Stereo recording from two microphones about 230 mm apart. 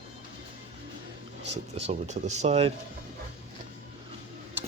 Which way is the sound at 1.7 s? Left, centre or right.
Right.